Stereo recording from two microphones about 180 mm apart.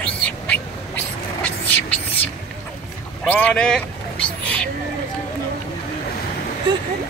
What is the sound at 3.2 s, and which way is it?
Speech, 10° left (ahead or behind).